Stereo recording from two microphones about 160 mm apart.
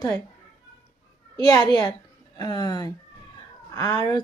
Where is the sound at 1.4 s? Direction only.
25° left (ahead or behind).